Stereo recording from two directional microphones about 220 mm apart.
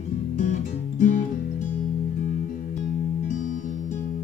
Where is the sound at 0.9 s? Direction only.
35° left (ahead or behind).